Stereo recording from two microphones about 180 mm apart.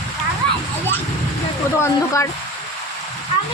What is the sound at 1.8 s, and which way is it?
Speech, 15° left (ahead or behind).